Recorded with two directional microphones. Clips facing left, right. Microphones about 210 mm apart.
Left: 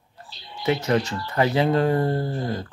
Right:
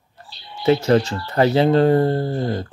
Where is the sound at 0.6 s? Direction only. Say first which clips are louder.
Right 6 dB; 30° right (ahead or behind).